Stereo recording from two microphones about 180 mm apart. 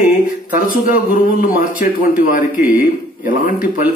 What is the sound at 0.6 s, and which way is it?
A man's voice, 50° left (ahead or behind).